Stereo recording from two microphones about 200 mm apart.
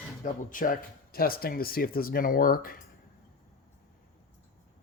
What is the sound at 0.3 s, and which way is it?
Speech, 40° left (ahead or behind).